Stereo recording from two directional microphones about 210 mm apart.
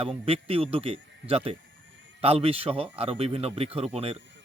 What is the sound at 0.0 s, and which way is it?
Speech, 30° right (ahead or behind).